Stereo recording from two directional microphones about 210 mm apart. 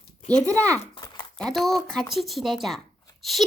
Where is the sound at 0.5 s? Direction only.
5° left (ahead or behind).